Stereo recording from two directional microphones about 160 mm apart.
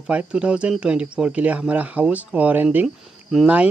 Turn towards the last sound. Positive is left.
turn(degrees=-5)  # may be behind; listen again after turning